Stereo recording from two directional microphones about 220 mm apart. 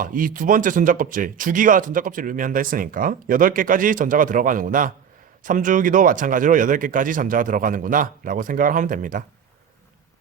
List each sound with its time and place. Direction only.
0.0 s speech: 35° right (ahead or behind)